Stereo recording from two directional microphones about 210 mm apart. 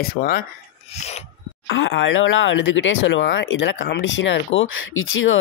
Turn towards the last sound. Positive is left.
turn(degrees=70)  # may be behind; listen again after turning